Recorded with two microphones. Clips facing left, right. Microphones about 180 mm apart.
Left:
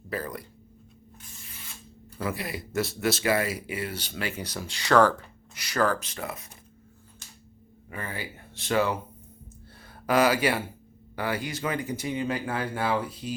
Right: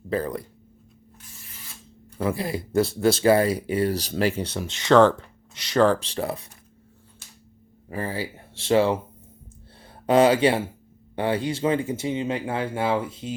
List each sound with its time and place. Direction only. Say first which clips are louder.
0.1 s speech: right 7 dB; 30° right (ahead or behind)
2.1 s speech: right 6 dB; 25° right (ahead or behind)
7.9 s speech: right 7 dB; 30° right (ahead or behind)
10.1 s speech: right 5 dB; 25° right (ahead or behind)